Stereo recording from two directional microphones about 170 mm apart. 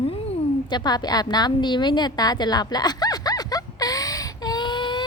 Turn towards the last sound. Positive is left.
turn(degrees=25)  # may be behind; listen again after turning